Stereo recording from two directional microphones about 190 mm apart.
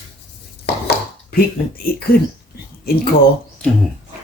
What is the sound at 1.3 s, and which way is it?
Speech, 50° left (ahead or behind).